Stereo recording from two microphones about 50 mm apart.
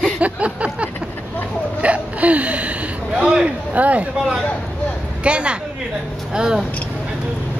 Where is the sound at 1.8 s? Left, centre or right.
Right.